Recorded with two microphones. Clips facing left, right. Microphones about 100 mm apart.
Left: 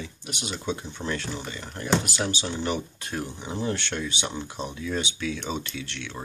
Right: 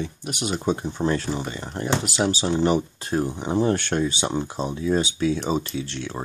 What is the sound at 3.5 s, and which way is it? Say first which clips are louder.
Speech: right 8 dB; 50° right (ahead or behind).